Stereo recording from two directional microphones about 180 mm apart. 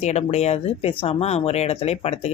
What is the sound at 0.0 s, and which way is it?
Speech, 35° left (ahead or behind).